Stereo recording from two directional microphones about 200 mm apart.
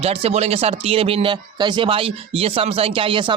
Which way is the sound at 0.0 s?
30° right (ahead or behind).